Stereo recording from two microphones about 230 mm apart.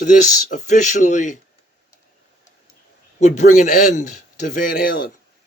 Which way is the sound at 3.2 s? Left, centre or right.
Left.